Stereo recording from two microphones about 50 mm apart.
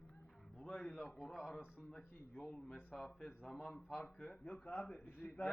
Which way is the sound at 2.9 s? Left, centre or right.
Centre.